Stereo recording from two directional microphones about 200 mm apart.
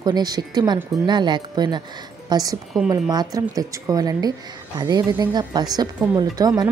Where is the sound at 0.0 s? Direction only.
20° right (ahead or behind).